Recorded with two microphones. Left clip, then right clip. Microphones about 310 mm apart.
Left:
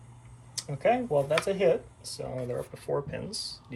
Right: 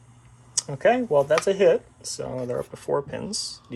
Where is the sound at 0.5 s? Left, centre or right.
Right.